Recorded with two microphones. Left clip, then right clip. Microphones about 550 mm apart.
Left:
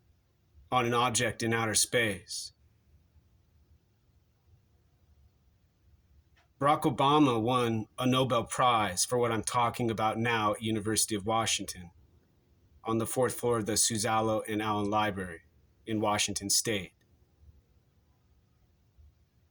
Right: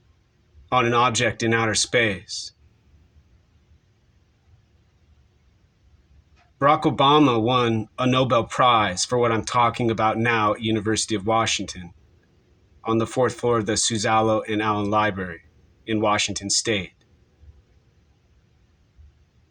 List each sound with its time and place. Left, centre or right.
0.7 s speech: left
6.6 s speech: left